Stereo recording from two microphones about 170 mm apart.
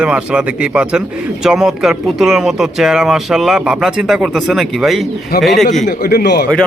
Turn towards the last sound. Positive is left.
turn(degrees=70)  # may be behind; listen again after turning